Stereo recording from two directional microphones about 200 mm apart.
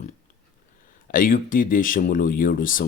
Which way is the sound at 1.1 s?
45° left (ahead or behind).